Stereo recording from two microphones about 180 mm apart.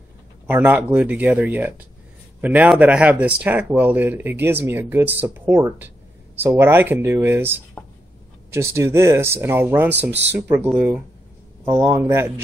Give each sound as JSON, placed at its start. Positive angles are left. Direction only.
{"t": 0.5, "sound": "speech", "side_deg": -10}
{"t": 11.6, "sound": "speech", "side_deg": -15}